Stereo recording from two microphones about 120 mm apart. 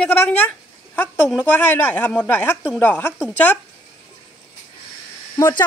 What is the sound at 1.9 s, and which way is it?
A woman's voice, 10° left (ahead or behind).